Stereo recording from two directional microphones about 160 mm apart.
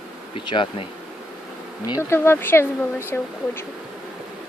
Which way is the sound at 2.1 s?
15° left (ahead or behind).